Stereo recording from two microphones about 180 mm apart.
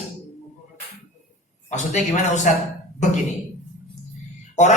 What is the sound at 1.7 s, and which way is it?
Speech, 40° left (ahead or behind).